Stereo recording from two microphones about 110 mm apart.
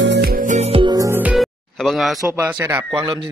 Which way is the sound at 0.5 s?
75° right (ahead or behind).